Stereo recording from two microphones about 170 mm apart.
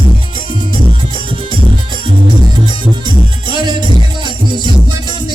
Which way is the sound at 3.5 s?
25° right (ahead or behind).